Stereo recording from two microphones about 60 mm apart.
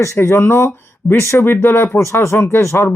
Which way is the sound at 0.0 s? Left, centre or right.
Left.